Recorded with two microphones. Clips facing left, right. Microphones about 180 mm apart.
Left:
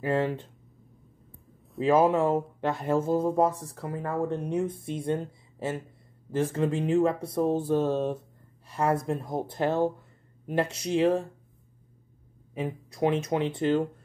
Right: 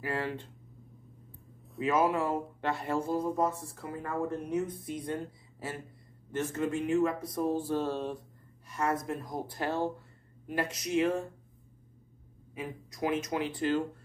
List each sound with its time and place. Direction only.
0.0 s speech: 20° left (ahead or behind)
1.8 s speech: 25° left (ahead or behind)
8.6 s speech: 30° left (ahead or behind)
12.5 s speech: 30° left (ahead or behind)